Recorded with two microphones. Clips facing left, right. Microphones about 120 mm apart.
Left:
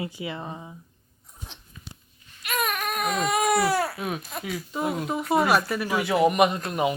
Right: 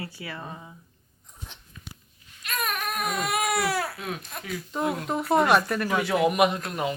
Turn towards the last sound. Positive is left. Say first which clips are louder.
# left 2 dB
turn(degrees=5)  # may be behind; listen again after turning